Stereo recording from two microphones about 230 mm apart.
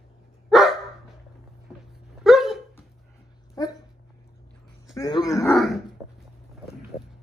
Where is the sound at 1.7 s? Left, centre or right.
Centre.